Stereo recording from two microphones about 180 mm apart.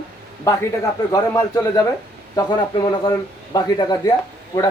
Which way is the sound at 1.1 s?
20° left (ahead or behind).